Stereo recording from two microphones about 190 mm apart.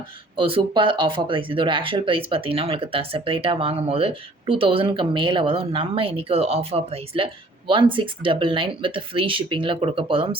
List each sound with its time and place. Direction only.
0.3 s speech: 30° right (ahead or behind)